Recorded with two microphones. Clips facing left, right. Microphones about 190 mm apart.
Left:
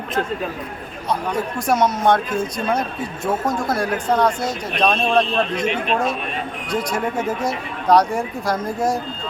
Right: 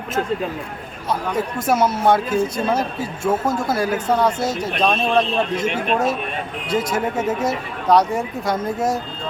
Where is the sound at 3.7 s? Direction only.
5° right (ahead or behind).